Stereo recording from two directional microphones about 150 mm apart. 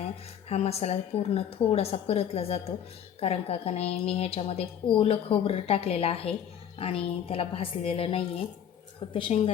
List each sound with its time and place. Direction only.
0.0 s a woman's voice: 45° left (ahead or behind)
9.3 s a woman's voice: 45° left (ahead or behind)